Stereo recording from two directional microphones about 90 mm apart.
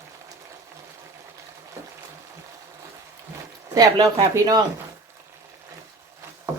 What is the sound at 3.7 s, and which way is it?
Speech, 45° right (ahead or behind).